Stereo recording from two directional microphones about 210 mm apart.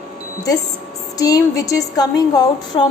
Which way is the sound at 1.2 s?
15° left (ahead or behind).